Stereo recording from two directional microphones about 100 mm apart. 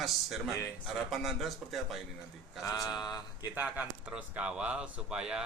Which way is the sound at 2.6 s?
35° left (ahead or behind).